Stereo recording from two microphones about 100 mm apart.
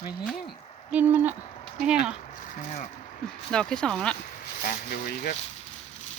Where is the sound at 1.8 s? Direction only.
10° right (ahead or behind).